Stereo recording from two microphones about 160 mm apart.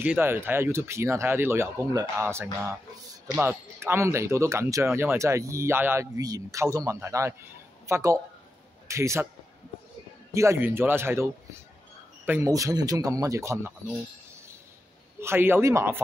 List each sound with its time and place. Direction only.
0.0 s a man's voice: 10° right (ahead or behind)
10.3 s speech: 15° right (ahead or behind)
12.3 s speech: 20° right (ahead or behind)
15.1 s speech: 15° right (ahead or behind)